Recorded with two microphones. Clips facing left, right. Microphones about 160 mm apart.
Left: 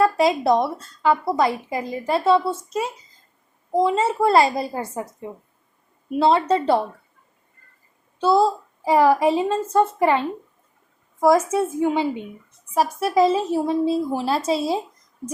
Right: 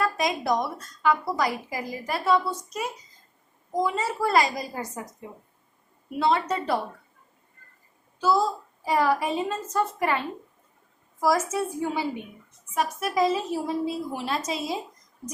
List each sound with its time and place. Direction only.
0.0 s a woman's voice: 30° left (ahead or behind)
6.1 s a woman's voice: 30° left (ahead or behind)
8.2 s a child's voice: 30° left (ahead or behind)
12.7 s a woman's voice: 35° left (ahead or behind)